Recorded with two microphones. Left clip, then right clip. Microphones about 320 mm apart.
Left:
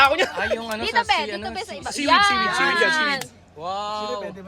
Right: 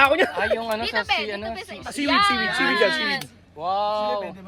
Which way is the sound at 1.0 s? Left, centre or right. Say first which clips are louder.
Left 2 dB; left.